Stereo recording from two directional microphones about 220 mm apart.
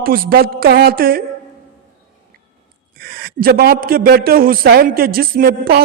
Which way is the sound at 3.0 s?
40° right (ahead or behind).